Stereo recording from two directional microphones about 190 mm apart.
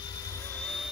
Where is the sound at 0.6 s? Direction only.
5° left (ahead or behind).